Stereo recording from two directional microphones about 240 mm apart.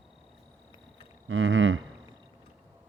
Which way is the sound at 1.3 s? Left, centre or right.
Right.